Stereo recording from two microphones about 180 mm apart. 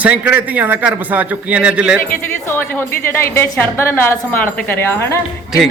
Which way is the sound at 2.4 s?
10° left (ahead or behind).